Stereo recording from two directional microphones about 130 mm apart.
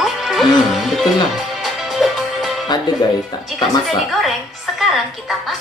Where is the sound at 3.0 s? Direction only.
30° left (ahead or behind).